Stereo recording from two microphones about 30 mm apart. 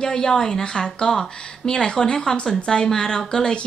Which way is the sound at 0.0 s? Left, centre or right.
Left.